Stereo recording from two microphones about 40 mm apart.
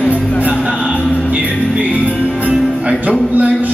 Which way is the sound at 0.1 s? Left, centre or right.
Right.